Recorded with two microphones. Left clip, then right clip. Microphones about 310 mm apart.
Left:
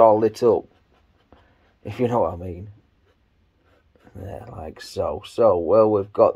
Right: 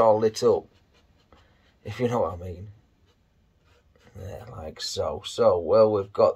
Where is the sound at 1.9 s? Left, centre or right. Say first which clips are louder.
Left 4 dB; left.